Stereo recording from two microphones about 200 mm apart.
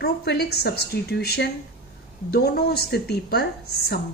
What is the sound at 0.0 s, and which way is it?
A woman's voice, 50° left (ahead or behind).